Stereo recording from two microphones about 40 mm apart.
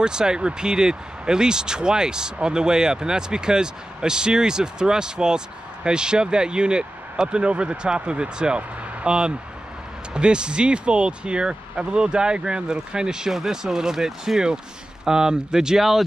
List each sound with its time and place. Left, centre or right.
0.0 s speech: centre